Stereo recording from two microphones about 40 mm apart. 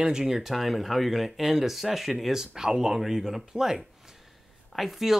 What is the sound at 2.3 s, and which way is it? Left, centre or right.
Speech, centre.